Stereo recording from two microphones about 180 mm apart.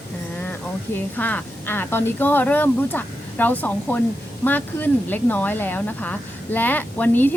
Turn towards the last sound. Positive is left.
turn(degrees=10)  # may be behind; listen again after turning